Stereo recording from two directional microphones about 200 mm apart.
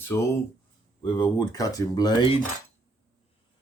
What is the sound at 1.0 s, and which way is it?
Speech, 20° left (ahead or behind).